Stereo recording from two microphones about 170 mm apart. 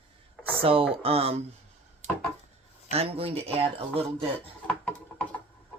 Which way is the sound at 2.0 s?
40° right (ahead or behind).